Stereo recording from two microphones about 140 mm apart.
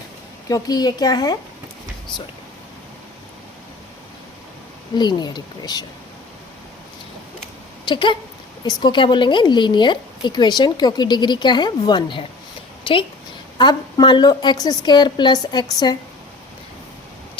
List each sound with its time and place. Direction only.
0.4 s speech: 25° left (ahead or behind)
4.9 s speech: 30° left (ahead or behind)
7.9 s speech: 35° left (ahead or behind)
12.8 s a sound: 40° left (ahead or behind)
13.6 s speech: 35° left (ahead or behind)